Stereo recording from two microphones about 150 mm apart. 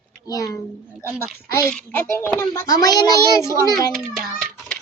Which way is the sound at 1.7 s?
15° left (ahead or behind).